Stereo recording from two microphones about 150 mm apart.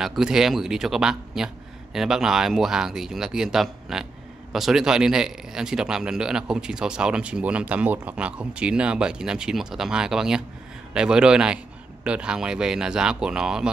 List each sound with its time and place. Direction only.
0.0 s speech: 5° right (ahead or behind)